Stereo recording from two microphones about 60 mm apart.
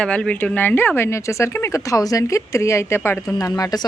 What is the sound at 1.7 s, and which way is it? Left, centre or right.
Speech, left.